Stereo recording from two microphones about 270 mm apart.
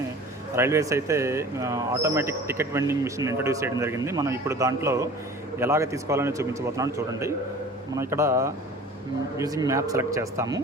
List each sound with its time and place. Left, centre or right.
0.5 s speech: centre